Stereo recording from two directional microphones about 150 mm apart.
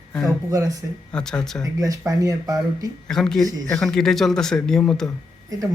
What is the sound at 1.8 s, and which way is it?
Speech, 25° right (ahead or behind).